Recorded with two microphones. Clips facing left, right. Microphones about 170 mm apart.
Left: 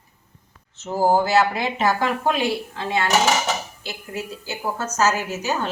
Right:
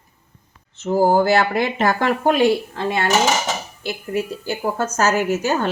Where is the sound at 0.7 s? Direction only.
55° right (ahead or behind).